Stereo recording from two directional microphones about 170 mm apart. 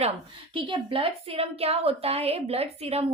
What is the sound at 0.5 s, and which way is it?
Speech, 30° right (ahead or behind).